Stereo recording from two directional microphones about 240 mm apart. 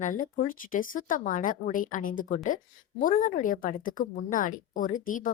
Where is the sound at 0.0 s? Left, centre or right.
Left.